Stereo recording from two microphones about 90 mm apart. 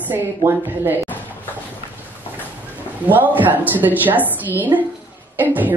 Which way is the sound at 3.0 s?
20° right (ahead or behind).